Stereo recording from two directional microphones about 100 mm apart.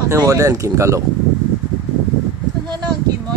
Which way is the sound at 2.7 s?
40° right (ahead or behind).